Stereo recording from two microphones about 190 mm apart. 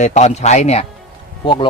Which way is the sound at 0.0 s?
40° left (ahead or behind).